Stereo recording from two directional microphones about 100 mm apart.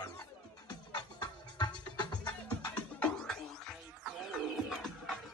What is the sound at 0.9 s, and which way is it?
Music, 45° left (ahead or behind).